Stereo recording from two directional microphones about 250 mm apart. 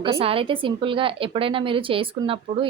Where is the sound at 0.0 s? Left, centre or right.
Right.